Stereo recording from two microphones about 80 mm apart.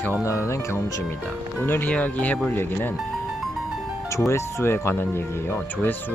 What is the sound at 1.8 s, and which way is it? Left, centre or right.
Speech, centre.